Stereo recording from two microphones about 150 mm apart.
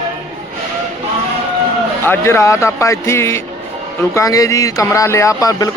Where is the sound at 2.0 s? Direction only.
15° left (ahead or behind).